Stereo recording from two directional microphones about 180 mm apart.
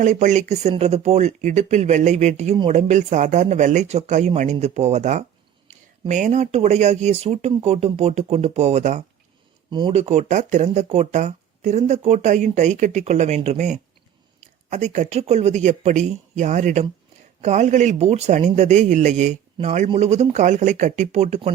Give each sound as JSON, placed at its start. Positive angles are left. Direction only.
{"t": 0.0, "sound": "speech", "side_deg": -40}
{"t": 9.7, "sound": "speech", "side_deg": -25}
{"t": 10.0, "sound": "speech", "side_deg": -40}